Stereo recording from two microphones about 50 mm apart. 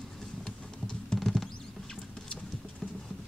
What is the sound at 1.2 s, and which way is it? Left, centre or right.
Patter, centre.